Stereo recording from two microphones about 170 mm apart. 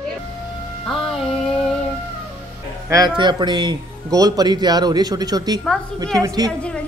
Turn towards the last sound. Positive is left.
turn(degrees=-20)  # may be behind; listen again after turning